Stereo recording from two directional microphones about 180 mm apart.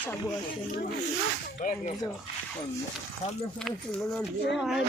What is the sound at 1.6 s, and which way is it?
Speech, 45° left (ahead or behind).